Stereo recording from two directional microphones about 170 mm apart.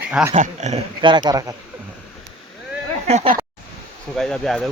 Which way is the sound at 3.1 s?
40° right (ahead or behind).